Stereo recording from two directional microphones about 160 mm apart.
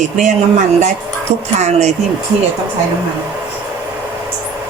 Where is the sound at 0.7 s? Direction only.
45° right (ahead or behind).